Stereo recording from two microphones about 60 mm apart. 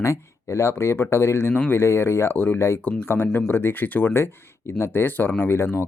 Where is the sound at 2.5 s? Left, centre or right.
Left.